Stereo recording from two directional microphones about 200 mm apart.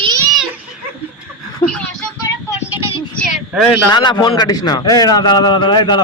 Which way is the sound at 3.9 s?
20° left (ahead or behind).